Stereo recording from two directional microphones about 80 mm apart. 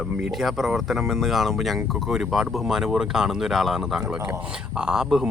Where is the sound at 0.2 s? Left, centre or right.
Centre.